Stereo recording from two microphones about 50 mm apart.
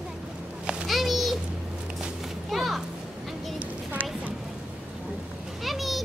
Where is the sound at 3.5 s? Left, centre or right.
Right.